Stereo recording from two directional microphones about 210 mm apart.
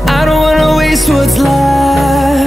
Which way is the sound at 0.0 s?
Centre (ahead or behind).